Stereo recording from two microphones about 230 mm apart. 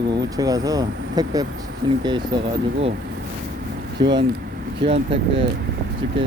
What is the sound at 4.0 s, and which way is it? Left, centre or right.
Speech, right.